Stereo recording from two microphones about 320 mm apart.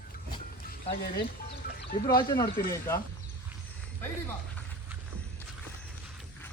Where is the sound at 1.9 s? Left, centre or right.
Left.